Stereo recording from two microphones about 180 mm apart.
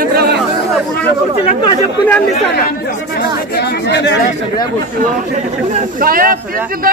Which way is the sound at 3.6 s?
75° left (ahead or behind).